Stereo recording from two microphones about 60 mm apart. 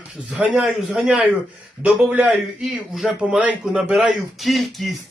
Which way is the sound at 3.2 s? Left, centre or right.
Centre.